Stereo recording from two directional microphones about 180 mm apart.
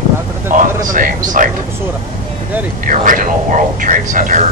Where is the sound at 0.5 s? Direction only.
50° right (ahead or behind).